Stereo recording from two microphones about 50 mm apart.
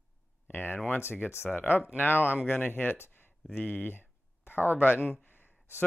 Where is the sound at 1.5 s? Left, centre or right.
Left.